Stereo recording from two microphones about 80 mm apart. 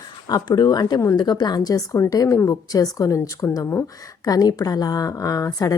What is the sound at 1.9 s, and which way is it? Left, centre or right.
Speech, left.